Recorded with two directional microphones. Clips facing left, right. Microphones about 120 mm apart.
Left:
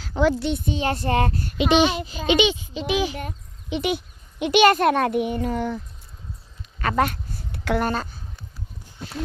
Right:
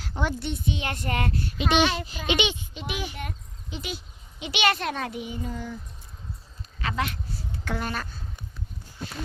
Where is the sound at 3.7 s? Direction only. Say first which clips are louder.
Left 11 dB; 65° left (ahead or behind).